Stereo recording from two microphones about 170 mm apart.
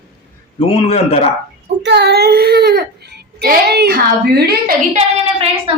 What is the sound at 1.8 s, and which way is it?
A woman's voice, 80° right.